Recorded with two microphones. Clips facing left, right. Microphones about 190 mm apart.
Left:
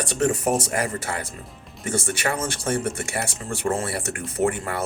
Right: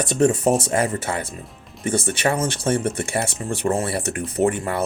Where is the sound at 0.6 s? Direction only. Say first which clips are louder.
Right 4 dB; 25° right (ahead or behind).